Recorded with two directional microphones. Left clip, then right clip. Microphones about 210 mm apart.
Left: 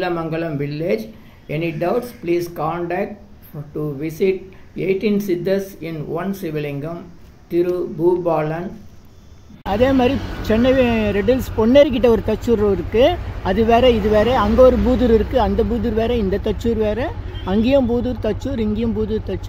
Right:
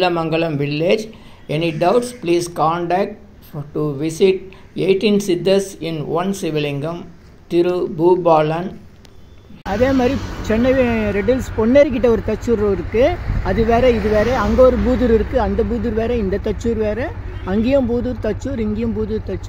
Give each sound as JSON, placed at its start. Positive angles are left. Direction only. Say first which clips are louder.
{"t": 0.0, "sound": "speech", "louder": "right 5 dB", "side_deg": -10}
{"t": 9.7, "sound": "speech", "louder": "even", "side_deg": 0}
{"t": 10.1, "sound": "speech", "louder": "even", "side_deg": -50}
{"t": 10.5, "sound": "speech", "louder": "even", "side_deg": 0}
{"t": 14.1, "sound": "speech", "louder": "left 1 dB", "side_deg": 10}
{"t": 14.4, "sound": "speech", "louder": "right 1 dB", "side_deg": 0}